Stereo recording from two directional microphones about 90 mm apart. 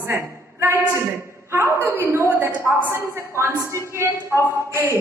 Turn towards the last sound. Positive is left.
turn(degrees=-25)  # may be behind; listen again after turning